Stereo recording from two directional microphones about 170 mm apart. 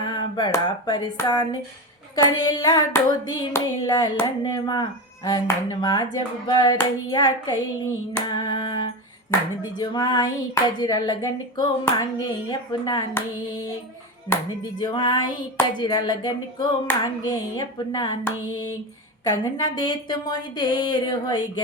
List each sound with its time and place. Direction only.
0.0 s a sound: 25° left (ahead or behind)
2.1 s hands: 25° left (ahead or behind)
19.2 s hands: 25° left (ahead or behind)